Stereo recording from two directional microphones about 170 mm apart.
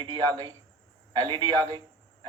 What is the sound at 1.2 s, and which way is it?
Speech, 30° right (ahead or behind).